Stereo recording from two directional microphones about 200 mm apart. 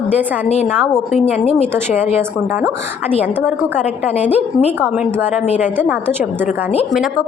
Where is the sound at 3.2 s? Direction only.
10° right (ahead or behind).